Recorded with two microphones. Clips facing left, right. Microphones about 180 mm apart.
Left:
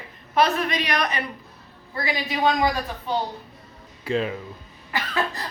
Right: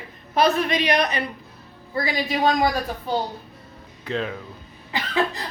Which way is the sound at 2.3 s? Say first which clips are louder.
Right 1 dB; 40° right (ahead or behind).